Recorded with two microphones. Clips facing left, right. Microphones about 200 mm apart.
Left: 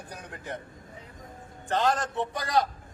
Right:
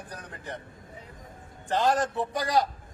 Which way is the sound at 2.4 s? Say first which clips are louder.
Right 1 dB; 35° right (ahead or behind).